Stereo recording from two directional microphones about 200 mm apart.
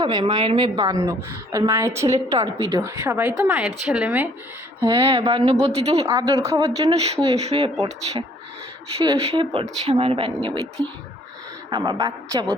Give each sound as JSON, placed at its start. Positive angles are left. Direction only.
{"t": 0.0, "sound": "a woman's voice", "side_deg": -20}
{"t": 4.8, "sound": "a woman's voice", "side_deg": -20}
{"t": 6.1, "sound": "a woman's voice", "side_deg": -15}
{"t": 6.8, "sound": "speech", "side_deg": -30}
{"t": 9.1, "sound": "a woman's voice", "side_deg": -30}
{"t": 11.7, "sound": "a woman's voice", "side_deg": -20}